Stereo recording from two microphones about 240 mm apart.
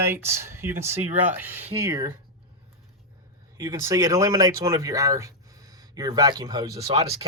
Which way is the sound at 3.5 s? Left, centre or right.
Centre.